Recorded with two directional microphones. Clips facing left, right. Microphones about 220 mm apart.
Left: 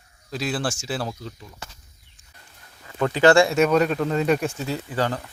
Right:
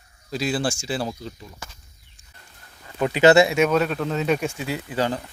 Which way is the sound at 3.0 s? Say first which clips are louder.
Right 1 dB; 20° right (ahead or behind).